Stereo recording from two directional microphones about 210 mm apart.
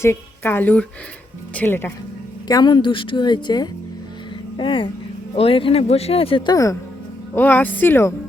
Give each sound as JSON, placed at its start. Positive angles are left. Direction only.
{"t": 0.0, "sound": "a woman's voice", "side_deg": 10}